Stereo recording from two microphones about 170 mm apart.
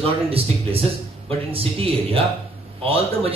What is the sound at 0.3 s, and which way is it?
A man's voice, 35° right (ahead or behind).